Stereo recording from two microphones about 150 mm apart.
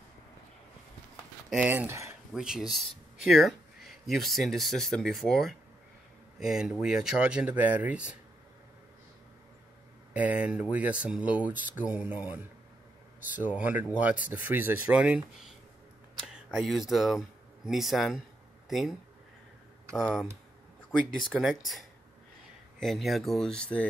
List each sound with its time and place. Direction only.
1.5 s speech: 10° right (ahead or behind)
2.3 s speech: 5° right (ahead or behind)
10.1 s speech: 10° right (ahead or behind); by 23.9 s 5° left (ahead or behind)